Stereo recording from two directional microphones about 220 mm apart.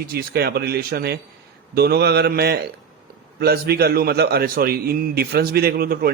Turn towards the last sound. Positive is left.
turn(degrees=-45)  # may be behind; listen again after turning